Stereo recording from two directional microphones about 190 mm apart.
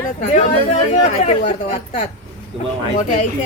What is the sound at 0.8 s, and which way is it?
Speech, 35° left (ahead or behind).